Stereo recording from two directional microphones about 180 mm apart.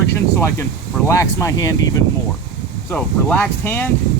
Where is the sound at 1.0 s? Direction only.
15° left (ahead or behind).